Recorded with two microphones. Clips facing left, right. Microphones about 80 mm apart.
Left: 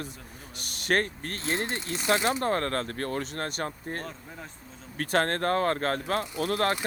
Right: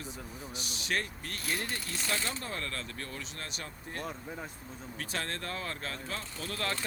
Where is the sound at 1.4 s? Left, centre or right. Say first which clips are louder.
Left 6 dB; left.